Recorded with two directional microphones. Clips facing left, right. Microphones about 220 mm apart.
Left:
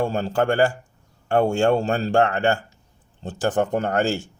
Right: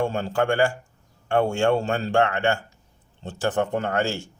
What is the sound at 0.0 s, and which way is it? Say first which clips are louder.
Speech: left 2 dB; 40° left (ahead or behind).